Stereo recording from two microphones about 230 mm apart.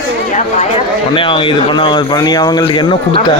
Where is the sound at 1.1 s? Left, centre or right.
Left.